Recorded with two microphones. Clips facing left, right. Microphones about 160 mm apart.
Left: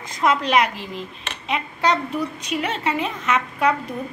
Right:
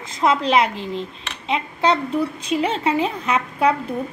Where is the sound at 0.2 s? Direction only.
30° right (ahead or behind).